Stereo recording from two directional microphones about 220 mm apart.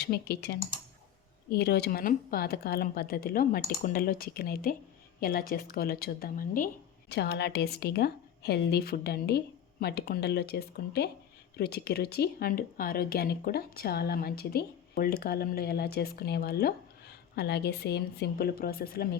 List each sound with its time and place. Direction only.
0.0 s speech: 45° left (ahead or behind)
7.1 s speech: 50° left (ahead or behind)